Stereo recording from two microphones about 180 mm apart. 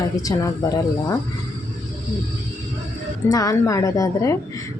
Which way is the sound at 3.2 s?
20° left (ahead or behind).